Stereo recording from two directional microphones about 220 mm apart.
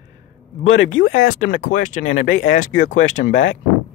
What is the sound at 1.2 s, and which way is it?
Speech, 35° left (ahead or behind).